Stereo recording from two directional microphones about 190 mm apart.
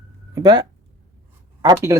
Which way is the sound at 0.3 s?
20° right (ahead or behind).